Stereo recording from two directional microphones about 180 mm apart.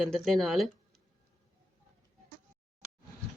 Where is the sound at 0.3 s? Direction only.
Centre (ahead or behind).